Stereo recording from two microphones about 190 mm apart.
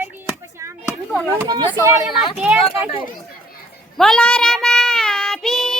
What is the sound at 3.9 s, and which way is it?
Child singing, centre (ahead or behind).